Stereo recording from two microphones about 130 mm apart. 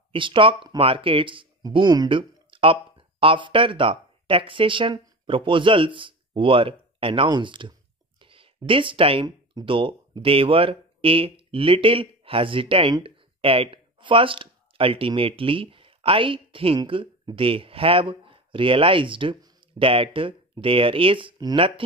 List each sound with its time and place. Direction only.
0.1 s speech: 40° right (ahead or behind)